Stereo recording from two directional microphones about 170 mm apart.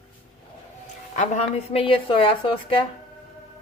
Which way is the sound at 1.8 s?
30° left (ahead or behind).